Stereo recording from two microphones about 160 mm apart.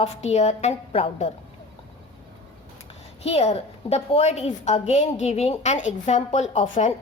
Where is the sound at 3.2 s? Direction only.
40° left (ahead or behind).